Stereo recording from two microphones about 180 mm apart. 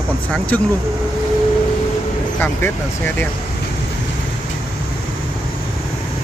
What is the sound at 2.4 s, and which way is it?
Speech, 10° left (ahead or behind).